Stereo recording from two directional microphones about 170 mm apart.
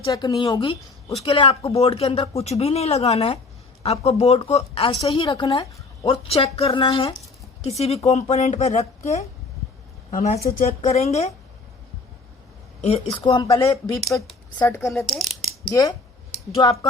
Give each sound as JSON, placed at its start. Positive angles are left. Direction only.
{"t": 0.1, "sound": "a woman's voice", "side_deg": 20}
{"t": 12.8, "sound": "speech", "side_deg": 35}
{"t": 15.1, "sound": "speech", "side_deg": 0}
{"t": 15.7, "sound": "speech", "side_deg": 20}